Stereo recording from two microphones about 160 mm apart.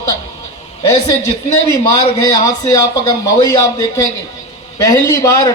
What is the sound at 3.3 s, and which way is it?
A woman's voice, 20° left (ahead or behind).